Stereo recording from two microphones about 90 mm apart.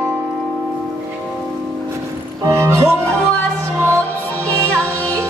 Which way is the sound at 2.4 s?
30° right (ahead or behind).